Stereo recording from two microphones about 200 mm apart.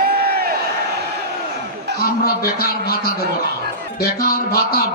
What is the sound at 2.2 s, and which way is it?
Music, 50° left (ahead or behind).